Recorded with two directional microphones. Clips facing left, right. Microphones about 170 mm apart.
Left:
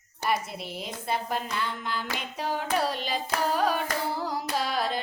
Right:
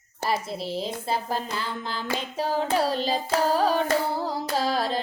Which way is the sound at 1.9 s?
30° right (ahead or behind).